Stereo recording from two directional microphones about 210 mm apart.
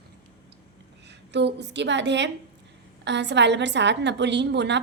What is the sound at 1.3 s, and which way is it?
A woman's voice, 55° right (ahead or behind).